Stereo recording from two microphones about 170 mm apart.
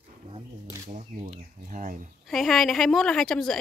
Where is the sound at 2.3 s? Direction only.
Centre (ahead or behind).